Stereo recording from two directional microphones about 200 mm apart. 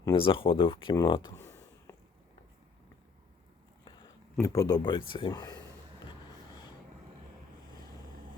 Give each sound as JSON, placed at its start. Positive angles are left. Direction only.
{"t": 0.0, "sound": "speech", "side_deg": 25}
{"t": 1.4, "sound": "a sound", "side_deg": 15}
{"t": 3.8, "sound": "speech", "side_deg": 20}